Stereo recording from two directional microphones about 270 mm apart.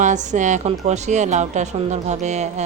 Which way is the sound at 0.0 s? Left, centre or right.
Right.